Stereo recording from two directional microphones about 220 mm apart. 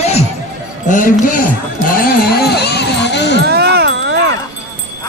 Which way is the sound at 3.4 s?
45° right (ahead or behind).